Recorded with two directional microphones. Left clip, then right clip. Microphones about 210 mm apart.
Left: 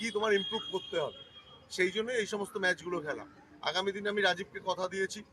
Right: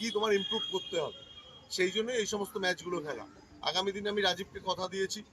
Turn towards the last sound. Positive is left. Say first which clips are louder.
# left 1 dB
turn(degrees=5)  # may be behind; listen again after turning